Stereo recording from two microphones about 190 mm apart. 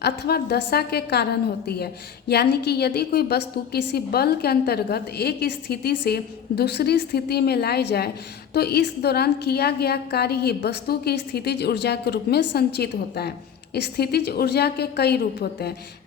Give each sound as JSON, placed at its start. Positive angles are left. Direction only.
{"t": 0.0, "sound": "a woman's voice", "side_deg": 55}